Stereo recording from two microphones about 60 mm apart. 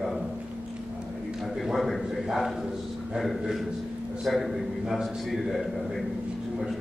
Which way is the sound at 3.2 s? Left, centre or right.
Centre.